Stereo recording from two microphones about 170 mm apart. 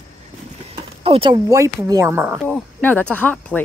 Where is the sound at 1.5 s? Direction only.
20° right (ahead or behind).